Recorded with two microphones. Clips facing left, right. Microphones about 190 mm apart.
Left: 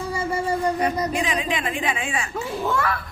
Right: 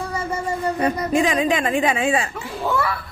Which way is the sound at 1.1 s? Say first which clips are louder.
Right 6 dB; 45° right (ahead or behind).